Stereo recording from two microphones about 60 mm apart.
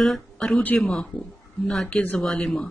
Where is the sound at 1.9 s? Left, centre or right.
Left.